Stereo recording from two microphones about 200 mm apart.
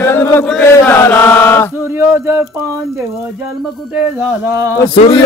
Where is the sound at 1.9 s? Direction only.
10° right (ahead or behind).